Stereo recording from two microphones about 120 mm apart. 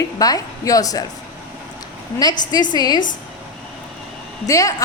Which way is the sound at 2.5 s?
35° left (ahead or behind).